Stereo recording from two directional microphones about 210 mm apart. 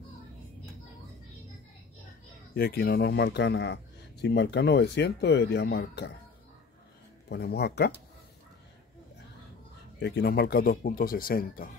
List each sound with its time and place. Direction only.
2.5 s speech: 45° left (ahead or behind)
7.2 s speech: 50° left (ahead or behind)
9.9 s speech: 50° left (ahead or behind)